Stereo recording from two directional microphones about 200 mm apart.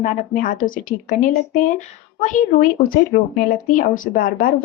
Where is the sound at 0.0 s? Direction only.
45° left (ahead or behind).